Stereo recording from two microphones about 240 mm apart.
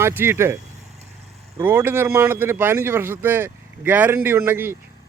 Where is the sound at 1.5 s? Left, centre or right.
Centre.